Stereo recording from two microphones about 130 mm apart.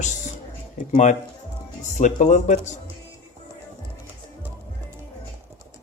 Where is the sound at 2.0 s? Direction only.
70° left (ahead or behind).